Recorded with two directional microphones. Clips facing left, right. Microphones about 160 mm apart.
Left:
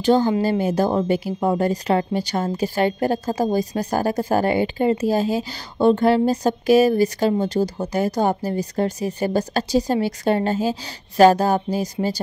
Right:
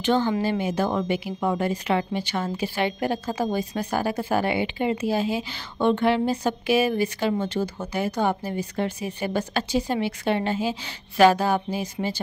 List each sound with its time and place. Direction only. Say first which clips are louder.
0.0 s a woman's voice: left 5 dB; 40° left (ahead or behind)